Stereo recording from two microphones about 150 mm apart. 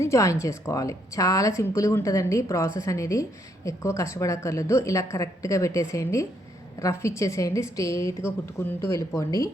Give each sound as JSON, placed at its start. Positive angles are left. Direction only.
{"t": 0.0, "sound": "speech", "side_deg": 20}